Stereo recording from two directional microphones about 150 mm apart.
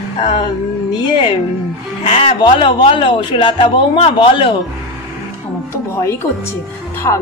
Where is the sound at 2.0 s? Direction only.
40° left (ahead or behind).